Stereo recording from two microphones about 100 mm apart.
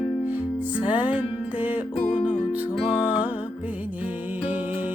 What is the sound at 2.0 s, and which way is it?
Music, 60° left (ahead or behind).